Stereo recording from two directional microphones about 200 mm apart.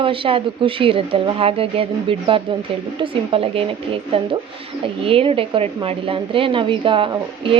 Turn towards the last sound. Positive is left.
turn(degrees=-25)  # may be behind; listen again after turning